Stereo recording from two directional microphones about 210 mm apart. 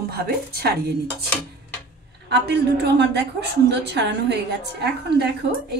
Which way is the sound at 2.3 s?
55° right (ahead or behind).